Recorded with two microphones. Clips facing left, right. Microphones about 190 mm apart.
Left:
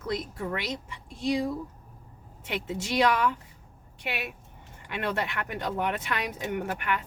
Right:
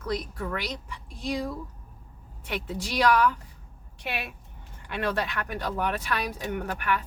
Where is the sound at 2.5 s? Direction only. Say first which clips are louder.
Left 1 dB; 20° left (ahead or behind).